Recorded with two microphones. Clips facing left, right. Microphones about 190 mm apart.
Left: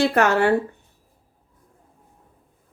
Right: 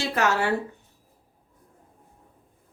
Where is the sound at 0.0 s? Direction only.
55° left (ahead or behind).